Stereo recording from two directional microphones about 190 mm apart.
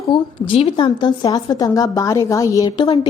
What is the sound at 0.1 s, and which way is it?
A woman's voice, 25° left (ahead or behind).